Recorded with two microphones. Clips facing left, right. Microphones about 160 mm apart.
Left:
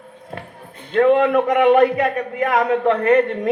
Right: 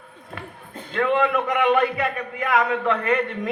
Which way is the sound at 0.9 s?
35° left (ahead or behind).